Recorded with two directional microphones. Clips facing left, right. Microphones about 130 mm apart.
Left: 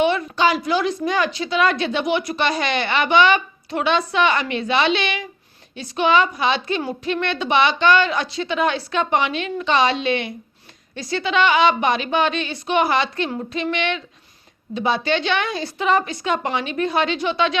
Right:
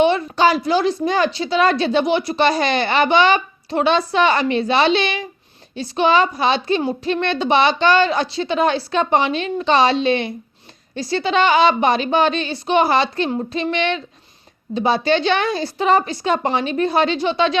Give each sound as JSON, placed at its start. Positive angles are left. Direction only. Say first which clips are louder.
{"t": 0.0, "sound": "a woman's voice", "louder": "right 3 dB", "side_deg": -30}